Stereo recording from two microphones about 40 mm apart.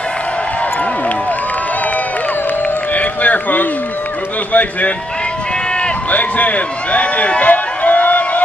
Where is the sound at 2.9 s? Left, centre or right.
Left.